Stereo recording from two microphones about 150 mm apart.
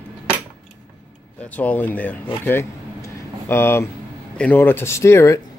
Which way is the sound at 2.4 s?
15° left (ahead or behind).